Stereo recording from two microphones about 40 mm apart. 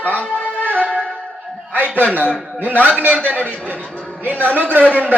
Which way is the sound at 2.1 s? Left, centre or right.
Right.